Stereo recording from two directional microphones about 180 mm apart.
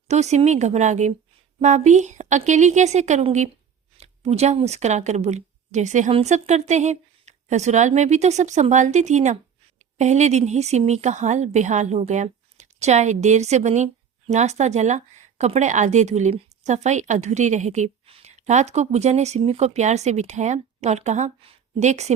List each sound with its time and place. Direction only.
0.1 s a woman's voice: 40° right (ahead or behind)